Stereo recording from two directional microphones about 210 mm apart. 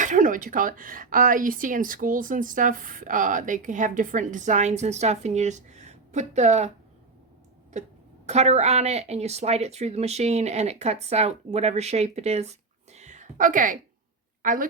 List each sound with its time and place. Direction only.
0.0 s speech: 35° right (ahead or behind)
7.7 s a woman's voice: 35° right (ahead or behind)